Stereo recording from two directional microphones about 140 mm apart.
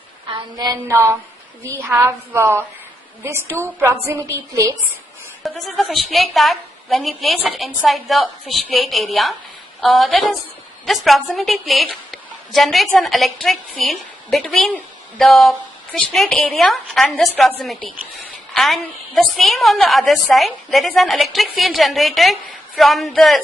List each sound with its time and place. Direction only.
0.5 s a woman's voice: 25° right (ahead or behind)
5.4 s a woman's voice: centre (ahead or behind)